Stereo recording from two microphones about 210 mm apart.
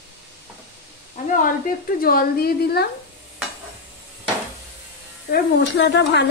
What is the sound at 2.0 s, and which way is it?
Speech, 45° left (ahead or behind).